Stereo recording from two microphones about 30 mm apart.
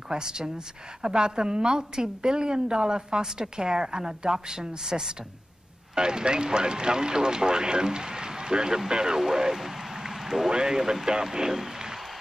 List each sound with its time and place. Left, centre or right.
0.1 s a woman's voice: right
9.3 s a sound: centre
10.5 s a woman's voice: right